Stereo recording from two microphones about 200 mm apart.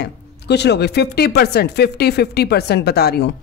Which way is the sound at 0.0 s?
55° left (ahead or behind).